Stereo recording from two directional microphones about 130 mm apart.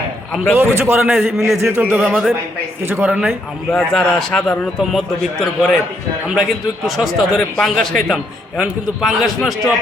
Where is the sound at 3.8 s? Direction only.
5° left (ahead or behind).